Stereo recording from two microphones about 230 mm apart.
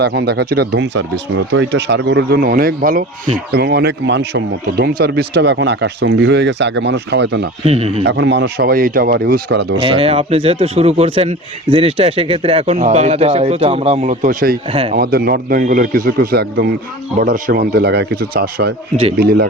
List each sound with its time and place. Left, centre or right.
0.0 s speech: right
7.6 s speech: right
8.0 s speech: right
9.8 s speech: right
14.7 s speech: right
14.9 s a man's voice: right